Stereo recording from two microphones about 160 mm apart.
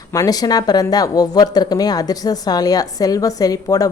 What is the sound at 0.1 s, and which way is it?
Speech, 20° left (ahead or behind).